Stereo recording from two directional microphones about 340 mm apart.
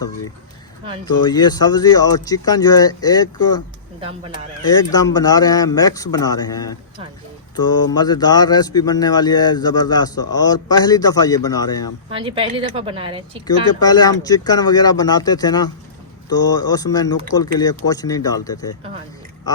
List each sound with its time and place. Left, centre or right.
1.2 s a man's voice: centre
4.7 s a man's voice: centre
12.1 s speech: centre
13.5 s a man's voice: centre